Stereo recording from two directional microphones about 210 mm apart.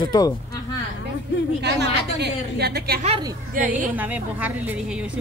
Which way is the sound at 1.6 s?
55° right (ahead or behind).